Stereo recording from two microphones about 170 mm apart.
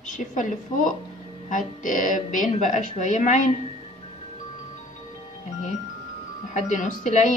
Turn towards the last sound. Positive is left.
turn(degrees=45)  # may be behind; listen again after turning